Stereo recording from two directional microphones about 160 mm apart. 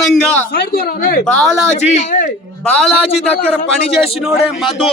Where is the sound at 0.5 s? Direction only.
75° left (ahead or behind).